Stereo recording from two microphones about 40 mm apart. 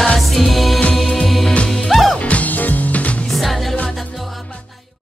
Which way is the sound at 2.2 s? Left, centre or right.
Left.